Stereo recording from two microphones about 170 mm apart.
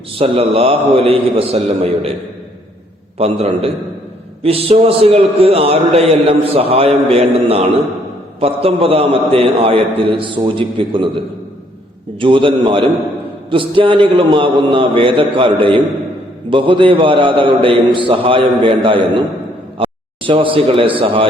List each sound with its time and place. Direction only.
0.2 s a man's voice: 35° right (ahead or behind)
3.2 s a man's voice: 35° right (ahead or behind)
12.2 s a man's voice: 30° right (ahead or behind)